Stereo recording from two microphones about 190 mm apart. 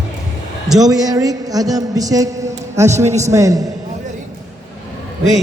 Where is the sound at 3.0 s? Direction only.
35° right (ahead or behind).